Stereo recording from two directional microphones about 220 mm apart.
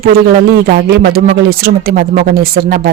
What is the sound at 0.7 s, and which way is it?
Speech, 45° right (ahead or behind).